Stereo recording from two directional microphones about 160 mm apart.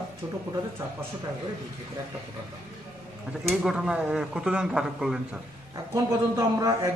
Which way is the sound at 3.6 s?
5° right (ahead or behind).